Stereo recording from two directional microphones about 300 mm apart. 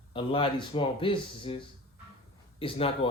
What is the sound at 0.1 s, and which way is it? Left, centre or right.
Speech, centre.